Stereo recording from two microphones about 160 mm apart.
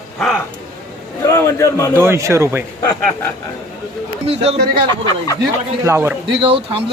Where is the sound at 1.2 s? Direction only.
20° left (ahead or behind).